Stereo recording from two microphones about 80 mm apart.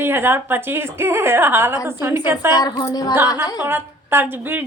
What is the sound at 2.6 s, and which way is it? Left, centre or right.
Speech, left.